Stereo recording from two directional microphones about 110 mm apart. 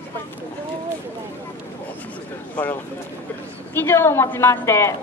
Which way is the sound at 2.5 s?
15° left (ahead or behind).